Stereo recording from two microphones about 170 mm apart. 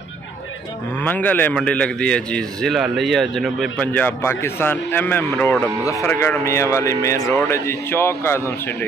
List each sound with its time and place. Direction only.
1.0 s a man's voice: 10° left (ahead or behind)